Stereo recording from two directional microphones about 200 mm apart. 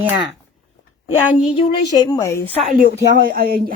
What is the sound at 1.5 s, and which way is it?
A woman's voice, 20° left (ahead or behind).